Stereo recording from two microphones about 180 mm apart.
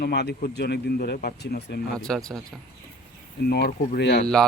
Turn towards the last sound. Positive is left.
turn(degrees=70)  # may be behind; listen again after turning